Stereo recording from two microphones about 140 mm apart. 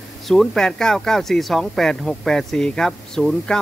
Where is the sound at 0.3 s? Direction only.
5° left (ahead or behind).